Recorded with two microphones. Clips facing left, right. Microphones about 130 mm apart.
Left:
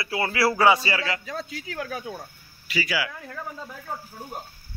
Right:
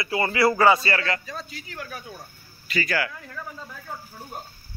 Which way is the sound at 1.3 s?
90° left.